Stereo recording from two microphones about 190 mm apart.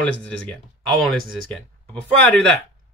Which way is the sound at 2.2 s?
5° left (ahead or behind).